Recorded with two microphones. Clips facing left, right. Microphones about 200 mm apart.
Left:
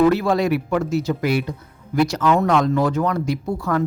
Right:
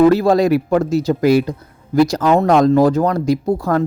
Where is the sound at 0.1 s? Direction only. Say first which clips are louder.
Right 6 dB; 35° right (ahead or behind).